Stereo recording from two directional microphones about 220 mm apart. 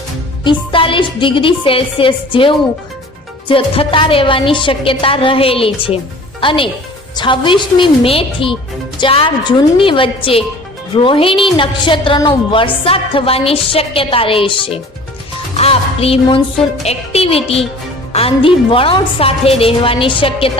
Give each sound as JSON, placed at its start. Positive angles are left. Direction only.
{"t": 0.7, "sound": "a woman's voice", "side_deg": 25}